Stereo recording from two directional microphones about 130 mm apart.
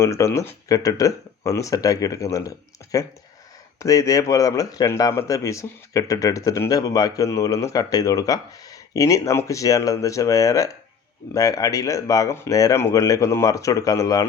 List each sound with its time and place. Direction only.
0.0 s speech: 20° left (ahead or behind)